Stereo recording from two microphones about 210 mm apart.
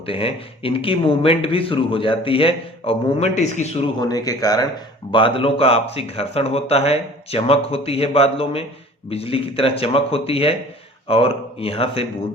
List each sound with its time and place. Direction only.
0.0 s speech: 25° left (ahead or behind)
4.0 s speech: 15° left (ahead or behind)